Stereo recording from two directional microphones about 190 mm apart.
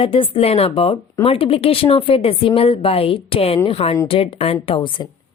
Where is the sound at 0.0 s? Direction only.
30° left (ahead or behind).